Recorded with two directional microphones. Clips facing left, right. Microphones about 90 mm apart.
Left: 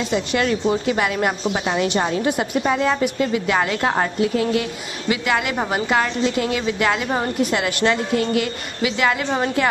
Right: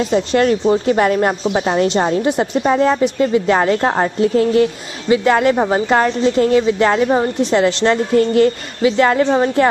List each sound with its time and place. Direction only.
0.1 s a woman's voice: 40° right (ahead or behind)
1.8 s a woman's voice: 25° right (ahead or behind)